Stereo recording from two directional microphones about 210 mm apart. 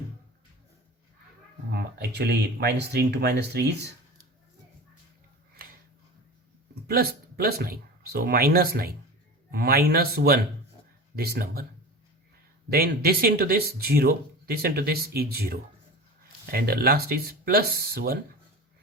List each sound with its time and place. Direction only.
1.7 s speech: 50° right (ahead or behind)
6.8 s speech: 45° right (ahead or behind)
12.7 s speech: 45° right (ahead or behind)